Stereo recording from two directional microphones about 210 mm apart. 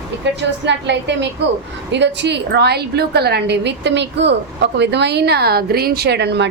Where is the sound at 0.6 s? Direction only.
55° right (ahead or behind).